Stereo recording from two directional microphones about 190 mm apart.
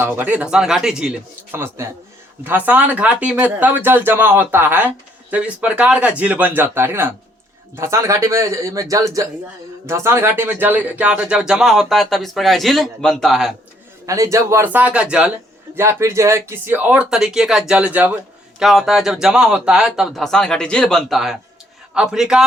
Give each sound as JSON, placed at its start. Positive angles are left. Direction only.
{"t": 0.0, "sound": "speech", "side_deg": -10}
{"t": 1.5, "sound": "speech", "side_deg": -15}
{"t": 14.1, "sound": "speech", "side_deg": -15}